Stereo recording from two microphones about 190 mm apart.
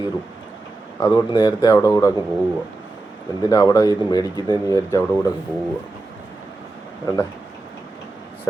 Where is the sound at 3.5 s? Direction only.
20° left (ahead or behind).